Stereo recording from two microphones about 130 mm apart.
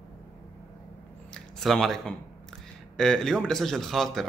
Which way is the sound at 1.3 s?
Centre (ahead or behind).